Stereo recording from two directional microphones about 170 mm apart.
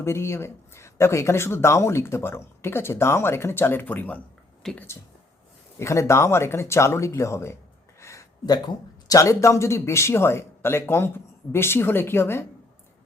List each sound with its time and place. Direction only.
0.0 s speech: 15° left (ahead or behind)
5.8 s speech: 15° left (ahead or behind)